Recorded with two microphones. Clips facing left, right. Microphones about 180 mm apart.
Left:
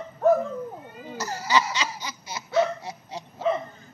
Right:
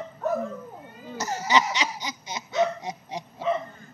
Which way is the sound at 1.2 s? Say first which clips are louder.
Right 1 dB; 20° right (ahead or behind).